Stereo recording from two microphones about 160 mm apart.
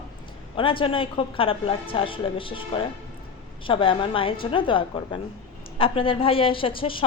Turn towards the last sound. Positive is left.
turn(degrees=35)  # may be behind; listen again after turning